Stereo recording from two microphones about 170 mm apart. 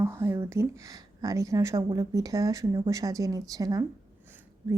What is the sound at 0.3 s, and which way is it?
A woman's voice, 15° right (ahead or behind).